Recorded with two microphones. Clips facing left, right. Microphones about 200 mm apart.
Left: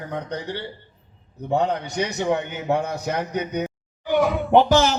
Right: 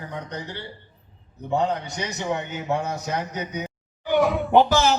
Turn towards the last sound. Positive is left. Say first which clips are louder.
# left 1 dB
turn(degrees=0)  # may be behind; listen again after turning